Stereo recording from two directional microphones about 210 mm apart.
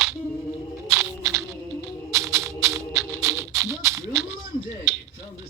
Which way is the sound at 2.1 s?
15° right (ahead or behind).